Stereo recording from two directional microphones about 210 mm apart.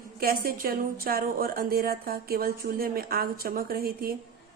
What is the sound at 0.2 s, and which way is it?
A woman's voice, 45° right (ahead or behind).